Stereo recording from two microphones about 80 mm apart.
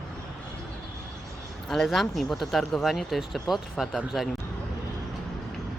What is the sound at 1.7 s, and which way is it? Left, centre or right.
Speech, centre.